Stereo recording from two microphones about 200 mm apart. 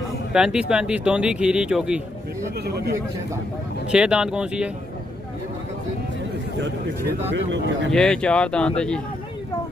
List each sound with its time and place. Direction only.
0.3 s speech: 5° right (ahead or behind)
3.9 s speech: 5° right (ahead or behind)
7.3 s speech: 65° right (ahead or behind)
7.9 s speech: 5° left (ahead or behind)